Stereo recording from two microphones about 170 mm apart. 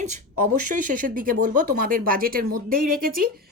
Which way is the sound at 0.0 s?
50° right (ahead or behind).